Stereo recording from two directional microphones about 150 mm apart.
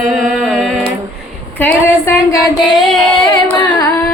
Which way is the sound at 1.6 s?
20° left (ahead or behind).